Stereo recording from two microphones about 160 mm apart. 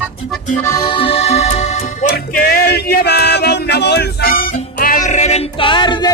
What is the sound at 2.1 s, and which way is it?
Music, 70° left (ahead or behind).